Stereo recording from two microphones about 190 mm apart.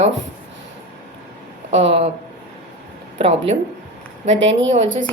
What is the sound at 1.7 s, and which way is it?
Speech, 70° right (ahead or behind).